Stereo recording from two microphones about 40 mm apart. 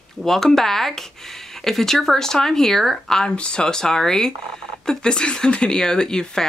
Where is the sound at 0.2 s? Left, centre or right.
Centre.